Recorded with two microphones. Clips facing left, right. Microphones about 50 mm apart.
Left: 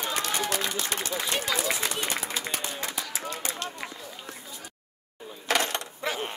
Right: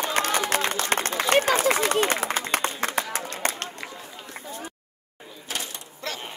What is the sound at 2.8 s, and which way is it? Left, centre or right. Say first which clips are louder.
Run: right 7 dB; right.